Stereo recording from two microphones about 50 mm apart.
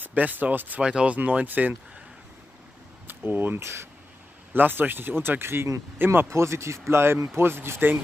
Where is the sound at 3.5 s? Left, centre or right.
Right.